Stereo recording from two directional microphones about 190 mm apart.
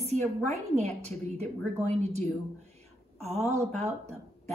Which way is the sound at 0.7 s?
35° right (ahead or behind).